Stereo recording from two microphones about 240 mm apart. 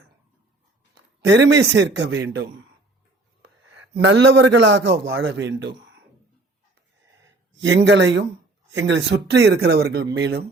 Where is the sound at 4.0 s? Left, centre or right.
Right.